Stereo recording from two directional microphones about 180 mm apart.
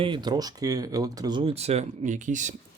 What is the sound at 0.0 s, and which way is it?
Speech, 25° right (ahead or behind).